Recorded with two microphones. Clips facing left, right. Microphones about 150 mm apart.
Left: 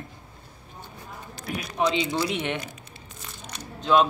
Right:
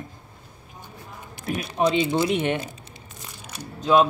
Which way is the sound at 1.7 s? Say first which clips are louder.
Right 3 dB; 30° right (ahead or behind).